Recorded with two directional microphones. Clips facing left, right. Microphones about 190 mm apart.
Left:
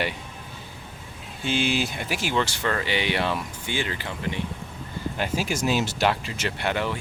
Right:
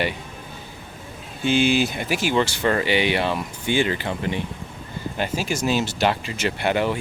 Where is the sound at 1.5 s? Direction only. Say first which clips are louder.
Right 6 dB; 5° right (ahead or behind).